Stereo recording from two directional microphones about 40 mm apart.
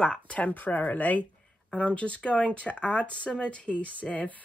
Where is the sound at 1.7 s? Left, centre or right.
Left.